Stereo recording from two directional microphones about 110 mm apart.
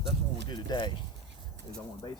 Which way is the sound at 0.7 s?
40° left (ahead or behind).